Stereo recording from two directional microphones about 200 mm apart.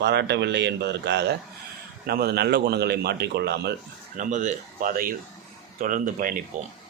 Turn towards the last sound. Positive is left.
turn(degrees=-45)  # may be behind; listen again after turning